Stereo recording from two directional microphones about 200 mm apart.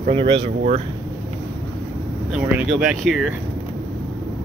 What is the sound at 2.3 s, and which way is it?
Speech, 5° right (ahead or behind).